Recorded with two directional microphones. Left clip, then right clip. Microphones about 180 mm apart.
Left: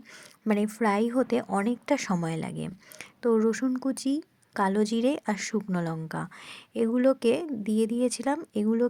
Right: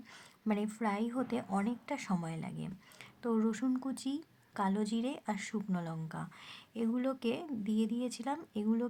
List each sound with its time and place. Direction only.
0.4 s speech: 35° left (ahead or behind)